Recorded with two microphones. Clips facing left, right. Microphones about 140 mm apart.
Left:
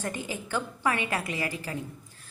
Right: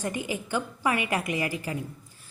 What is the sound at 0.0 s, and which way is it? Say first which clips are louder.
A woman's voice: right 3 dB; 15° right (ahead or behind).